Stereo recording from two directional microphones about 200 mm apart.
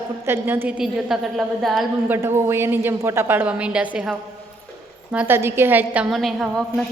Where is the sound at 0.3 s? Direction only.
10° right (ahead or behind).